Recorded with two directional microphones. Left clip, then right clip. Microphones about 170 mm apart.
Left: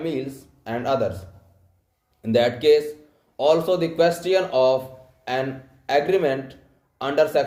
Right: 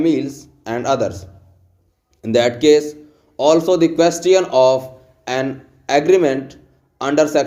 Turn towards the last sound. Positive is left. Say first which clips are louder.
# right 4 dB
turn(degrees=-45)  # may be behind; listen again after turning